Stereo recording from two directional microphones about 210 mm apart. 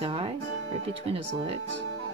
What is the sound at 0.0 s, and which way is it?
Music, 25° right (ahead or behind).